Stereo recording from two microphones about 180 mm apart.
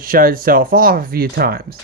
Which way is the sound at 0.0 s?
50° right (ahead or behind).